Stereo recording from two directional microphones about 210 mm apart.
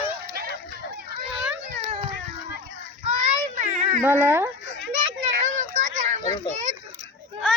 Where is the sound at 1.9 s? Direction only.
30° right (ahead or behind).